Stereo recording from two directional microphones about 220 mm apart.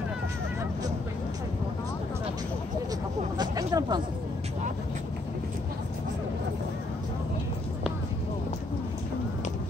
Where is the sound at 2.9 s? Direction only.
15° right (ahead or behind).